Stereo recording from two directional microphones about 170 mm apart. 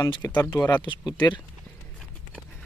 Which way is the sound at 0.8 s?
25° left (ahead or behind).